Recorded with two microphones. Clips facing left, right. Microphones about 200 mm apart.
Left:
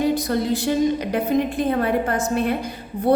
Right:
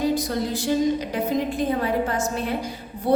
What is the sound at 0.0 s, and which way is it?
Speech, 60° left (ahead or behind).